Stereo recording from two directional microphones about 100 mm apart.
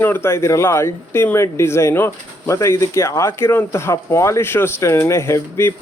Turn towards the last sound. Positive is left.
turn(degrees=30)  # may be behind; listen again after turning